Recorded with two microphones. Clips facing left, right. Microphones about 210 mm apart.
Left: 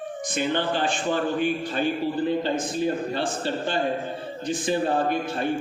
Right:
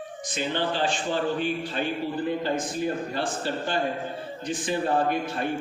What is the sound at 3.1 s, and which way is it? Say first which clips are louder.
Speech: left 2 dB; 25° left (ahead or behind).